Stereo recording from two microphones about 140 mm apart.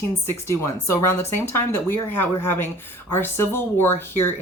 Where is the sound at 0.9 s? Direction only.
15° left (ahead or behind).